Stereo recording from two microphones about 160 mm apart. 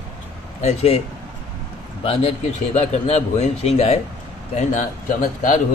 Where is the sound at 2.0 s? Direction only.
40° left (ahead or behind).